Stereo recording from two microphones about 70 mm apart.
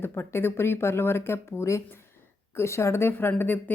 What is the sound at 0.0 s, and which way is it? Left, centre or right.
Speech, left.